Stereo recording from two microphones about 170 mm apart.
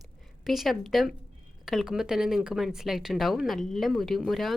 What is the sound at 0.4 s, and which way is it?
Speech, centre (ahead or behind).